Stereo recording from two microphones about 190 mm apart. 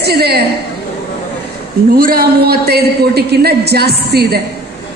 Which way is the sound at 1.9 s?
50° right (ahead or behind).